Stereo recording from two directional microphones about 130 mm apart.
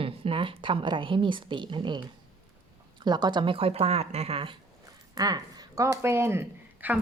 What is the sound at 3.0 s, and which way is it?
Speech, 35° right (ahead or behind).